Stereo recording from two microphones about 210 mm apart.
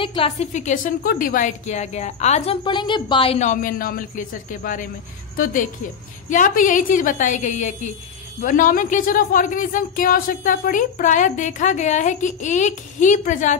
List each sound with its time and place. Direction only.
0.0 s a woman's voice: 25° left (ahead or behind)